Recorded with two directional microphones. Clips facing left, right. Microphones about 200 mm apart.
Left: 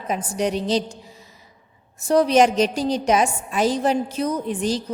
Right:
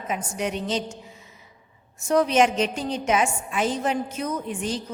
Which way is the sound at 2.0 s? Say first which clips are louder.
Left 4 dB; 35° left (ahead or behind).